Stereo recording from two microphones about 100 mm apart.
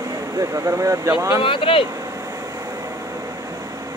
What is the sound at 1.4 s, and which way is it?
Speech, 60° left (ahead or behind).